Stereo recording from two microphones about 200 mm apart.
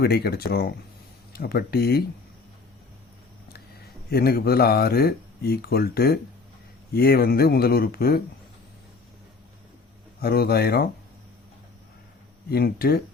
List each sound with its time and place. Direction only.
0.0 s speech: 55° left (ahead or behind)
4.1 s speech: 50° left (ahead or behind)
10.2 s speech: 50° left (ahead or behind)
12.5 s speech: 50° left (ahead or behind)